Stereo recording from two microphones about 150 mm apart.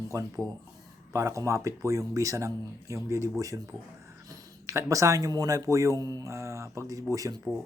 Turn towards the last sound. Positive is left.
turn(degrees=-25)  # may be behind; listen again after turning